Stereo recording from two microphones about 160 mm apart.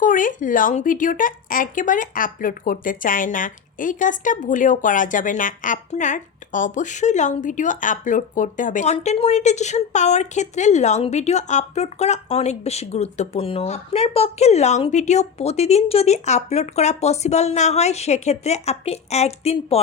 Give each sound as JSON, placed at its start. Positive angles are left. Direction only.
{"t": 0.0, "sound": "speech", "side_deg": 55}